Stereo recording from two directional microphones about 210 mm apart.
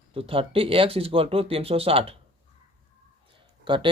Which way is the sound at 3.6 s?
25° right (ahead or behind).